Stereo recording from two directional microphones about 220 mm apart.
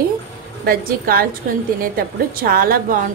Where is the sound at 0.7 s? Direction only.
40° right (ahead or behind).